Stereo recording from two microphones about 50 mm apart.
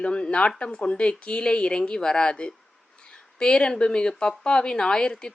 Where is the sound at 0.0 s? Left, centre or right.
Left.